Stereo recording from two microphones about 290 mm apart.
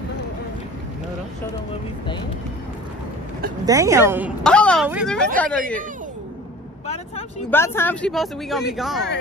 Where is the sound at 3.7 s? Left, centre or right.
Centre.